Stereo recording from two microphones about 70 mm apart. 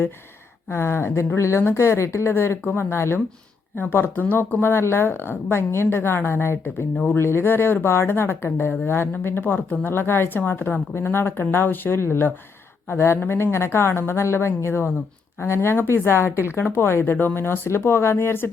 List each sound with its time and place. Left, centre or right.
0.7 s a woman's voice: left